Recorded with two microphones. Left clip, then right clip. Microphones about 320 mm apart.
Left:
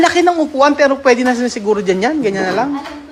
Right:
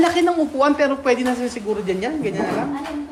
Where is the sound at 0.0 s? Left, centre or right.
Centre.